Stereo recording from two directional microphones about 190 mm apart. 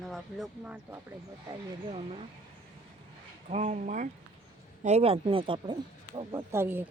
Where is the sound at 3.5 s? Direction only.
35° right (ahead or behind); by 6.9 s 10° right (ahead or behind).